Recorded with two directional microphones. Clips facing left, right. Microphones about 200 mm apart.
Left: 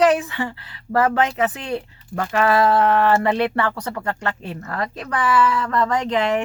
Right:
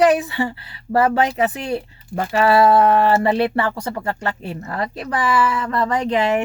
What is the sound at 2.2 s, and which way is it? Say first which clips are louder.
Speech: right 2 dB; 30° right (ahead or behind).